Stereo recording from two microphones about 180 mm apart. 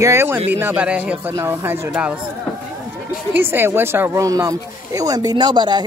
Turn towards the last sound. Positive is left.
turn(degrees=-25)  # may be behind; listen again after turning